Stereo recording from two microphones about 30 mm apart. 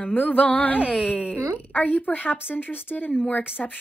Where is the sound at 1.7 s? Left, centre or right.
Left.